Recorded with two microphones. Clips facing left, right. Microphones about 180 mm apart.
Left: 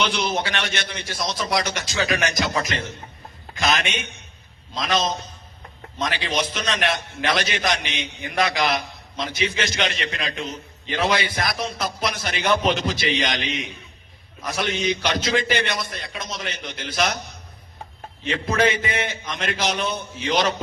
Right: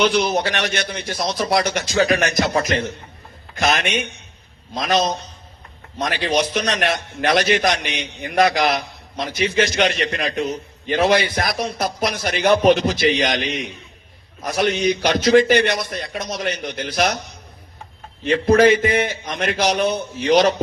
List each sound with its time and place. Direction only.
0.0 s a man's voice: 55° right (ahead or behind)
18.3 s a man's voice: 50° right (ahead or behind)